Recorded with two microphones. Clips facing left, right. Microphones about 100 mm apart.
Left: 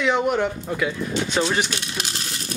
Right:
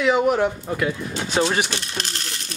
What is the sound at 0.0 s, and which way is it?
Speech, centre (ahead or behind).